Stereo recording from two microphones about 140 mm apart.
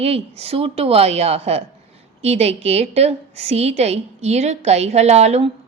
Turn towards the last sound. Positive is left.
turn(degrees=-50)  # may be behind; listen again after turning